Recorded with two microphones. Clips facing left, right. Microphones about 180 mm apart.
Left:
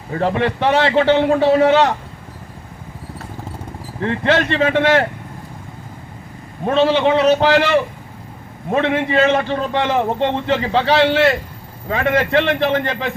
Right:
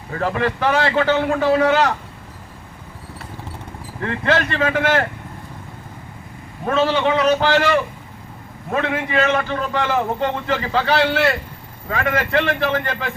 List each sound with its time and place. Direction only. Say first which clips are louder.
0.1 s a man's voice: left 3 dB; 30° left (ahead or behind)
4.0 s a man's voice: left 3 dB; 30° left (ahead or behind)
6.7 s a man's voice: left 3 dB; 25° left (ahead or behind)